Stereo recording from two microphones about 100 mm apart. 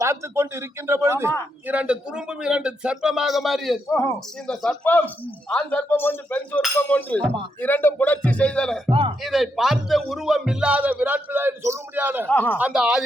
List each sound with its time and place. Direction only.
0.0 s speech: 30° right (ahead or behind)
1.6 s speech: 10° right (ahead or behind)
3.8 s speech: 30° left (ahead or behind)
4.4 s speech: 5° left (ahead or behind)
4.9 s a man's voice: 20° left (ahead or behind)
8.9 s a man's voice: 60° right (ahead or behind)
9.2 s speech: centre (ahead or behind); by 12.3 s 20° right (ahead or behind)
12.3 s a man's voice: 15° left (ahead or behind)
12.7 s speech: 5° right (ahead or behind)